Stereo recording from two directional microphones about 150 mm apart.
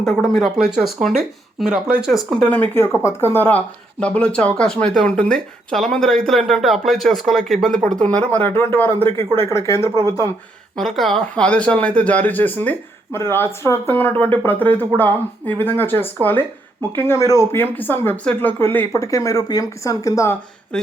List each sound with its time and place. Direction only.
0.0 s speech: centre (ahead or behind); by 9.9 s 20° left (ahead or behind)
10.8 s speech: centre (ahead or behind); by 20.3 s 20° left (ahead or behind)
20.7 s speech: 5° left (ahead or behind)